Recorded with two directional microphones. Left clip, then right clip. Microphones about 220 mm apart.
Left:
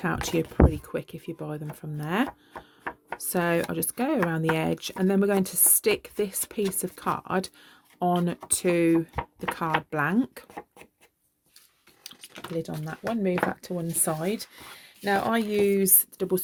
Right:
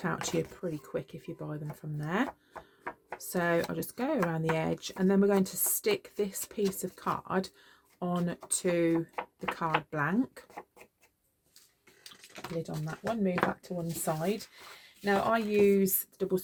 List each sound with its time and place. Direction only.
0.0 s speech: 35° left (ahead or behind)
2.5 s tick-tock: 25° left (ahead or behind)
3.2 s speech: 35° left (ahead or behind)
12.6 s speech: 50° left (ahead or behind)